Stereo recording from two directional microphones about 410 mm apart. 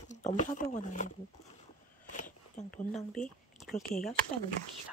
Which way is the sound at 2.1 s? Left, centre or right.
Centre.